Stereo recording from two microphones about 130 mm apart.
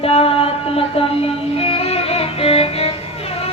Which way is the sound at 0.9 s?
45° left (ahead or behind).